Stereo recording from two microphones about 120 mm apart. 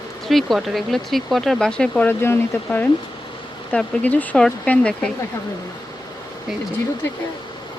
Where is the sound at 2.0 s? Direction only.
20° left (ahead or behind).